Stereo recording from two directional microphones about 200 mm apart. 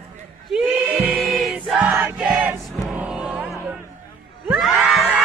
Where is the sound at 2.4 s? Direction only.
5° right (ahead or behind).